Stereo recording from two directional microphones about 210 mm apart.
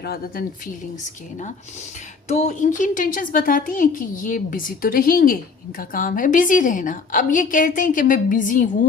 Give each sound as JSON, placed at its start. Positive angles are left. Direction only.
{"t": 0.0, "sound": "speech", "side_deg": 50}
{"t": 2.2, "sound": "a woman's voice", "side_deg": 30}